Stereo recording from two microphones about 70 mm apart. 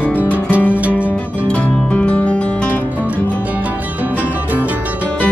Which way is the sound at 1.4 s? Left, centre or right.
Centre.